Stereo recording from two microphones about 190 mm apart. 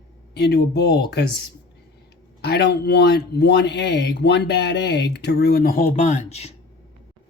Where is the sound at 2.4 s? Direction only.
60° left (ahead or behind); by 6.5 s 35° left (ahead or behind).